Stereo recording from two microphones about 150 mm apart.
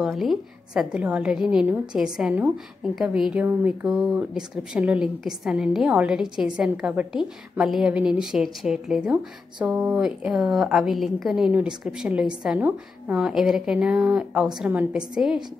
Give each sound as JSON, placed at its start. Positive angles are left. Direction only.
{"t": 0.0, "sound": "a woman's voice", "side_deg": 0}